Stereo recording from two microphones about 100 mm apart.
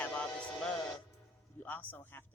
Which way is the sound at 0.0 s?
15° left (ahead or behind).